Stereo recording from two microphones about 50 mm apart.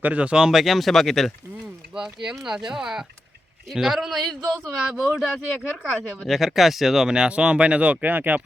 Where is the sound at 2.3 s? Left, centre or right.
Centre.